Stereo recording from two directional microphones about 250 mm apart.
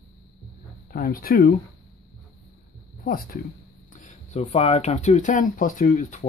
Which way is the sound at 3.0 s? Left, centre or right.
Left.